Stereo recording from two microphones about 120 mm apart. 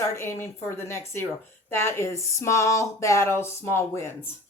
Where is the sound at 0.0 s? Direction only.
20° left (ahead or behind).